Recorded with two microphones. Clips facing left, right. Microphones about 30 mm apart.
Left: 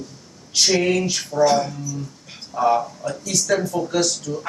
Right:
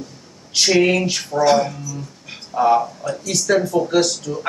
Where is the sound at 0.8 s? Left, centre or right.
Right.